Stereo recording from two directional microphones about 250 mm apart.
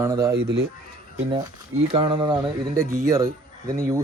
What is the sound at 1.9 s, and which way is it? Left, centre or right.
Speech, right.